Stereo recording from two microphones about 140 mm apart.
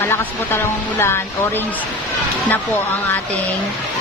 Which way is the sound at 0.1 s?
15° left (ahead or behind).